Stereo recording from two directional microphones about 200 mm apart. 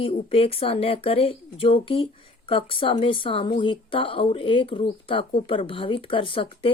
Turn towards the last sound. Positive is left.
turn(degrees=25)  # may be behind; listen again after turning